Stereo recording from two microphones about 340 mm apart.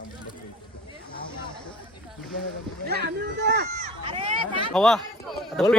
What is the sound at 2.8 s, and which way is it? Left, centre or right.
Speech, right.